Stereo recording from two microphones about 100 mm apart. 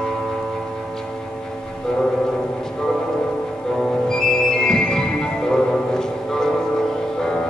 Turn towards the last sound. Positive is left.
turn(degrees=5)  # may be behind; listen again after turning